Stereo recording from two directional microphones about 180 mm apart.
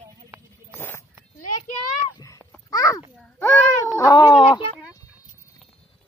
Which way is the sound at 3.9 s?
20° left (ahead or behind).